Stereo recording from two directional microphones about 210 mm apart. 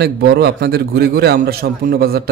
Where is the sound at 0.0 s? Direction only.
50° right (ahead or behind).